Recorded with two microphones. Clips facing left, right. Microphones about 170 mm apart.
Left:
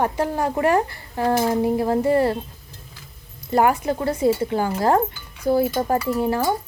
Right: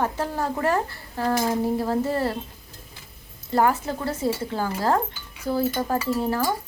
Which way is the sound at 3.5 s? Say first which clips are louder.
Left 3 dB; 15° left (ahead or behind).